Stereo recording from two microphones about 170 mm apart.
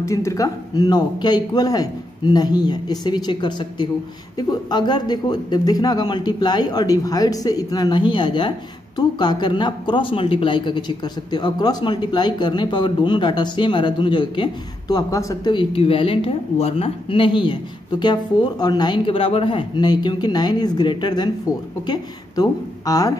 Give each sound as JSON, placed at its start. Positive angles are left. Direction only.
{"t": 0.0, "sound": "a man's voice", "side_deg": 15}